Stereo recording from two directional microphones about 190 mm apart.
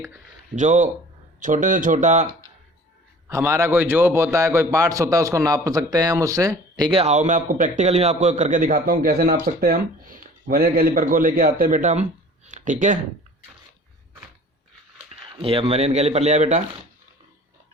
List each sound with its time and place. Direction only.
0.5 s a man's voice: 40° right (ahead or behind)
3.2 s a man's voice: 15° right (ahead or behind); by 13.0 s 40° right (ahead or behind)
15.1 s speech: 30° right (ahead or behind)